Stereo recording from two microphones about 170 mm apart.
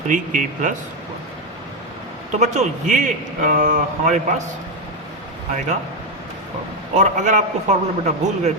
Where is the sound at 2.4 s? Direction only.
40° right (ahead or behind).